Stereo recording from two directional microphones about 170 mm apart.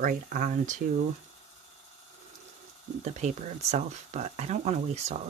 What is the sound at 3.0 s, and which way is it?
Speech, 40° right (ahead or behind).